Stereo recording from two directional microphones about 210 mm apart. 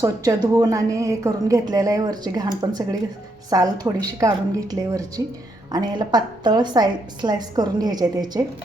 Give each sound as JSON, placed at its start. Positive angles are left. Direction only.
{"t": 0.0, "sound": "a woman's voice", "side_deg": -15}